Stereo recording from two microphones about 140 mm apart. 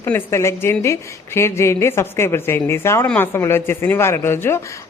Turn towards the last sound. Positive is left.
turn(degrees=15)  # may be behind; listen again after turning